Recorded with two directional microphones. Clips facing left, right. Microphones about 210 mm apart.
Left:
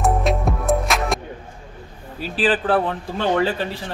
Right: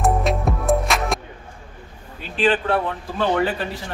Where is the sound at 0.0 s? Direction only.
Centre (ahead or behind).